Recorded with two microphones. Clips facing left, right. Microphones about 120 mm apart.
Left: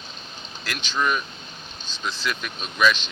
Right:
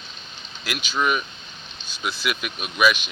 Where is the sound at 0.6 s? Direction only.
10° right (ahead or behind).